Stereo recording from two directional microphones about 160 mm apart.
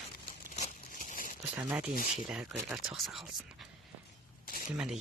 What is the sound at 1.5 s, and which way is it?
Speech, 10° right (ahead or behind).